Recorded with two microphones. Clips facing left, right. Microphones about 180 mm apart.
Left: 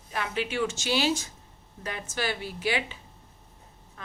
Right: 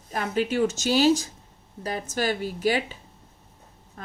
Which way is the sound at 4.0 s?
40° right (ahead or behind).